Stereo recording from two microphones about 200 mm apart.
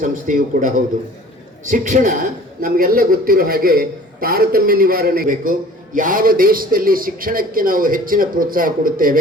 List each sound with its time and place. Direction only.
0.0 s a man's voice: 40° right (ahead or behind)